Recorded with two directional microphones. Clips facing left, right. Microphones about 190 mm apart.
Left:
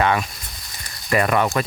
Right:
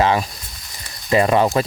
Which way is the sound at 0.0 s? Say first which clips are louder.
Right 2 dB; 30° right (ahead or behind).